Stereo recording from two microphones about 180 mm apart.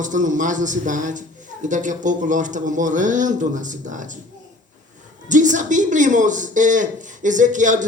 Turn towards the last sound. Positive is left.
turn(degrees=-45)  # may be behind; listen again after turning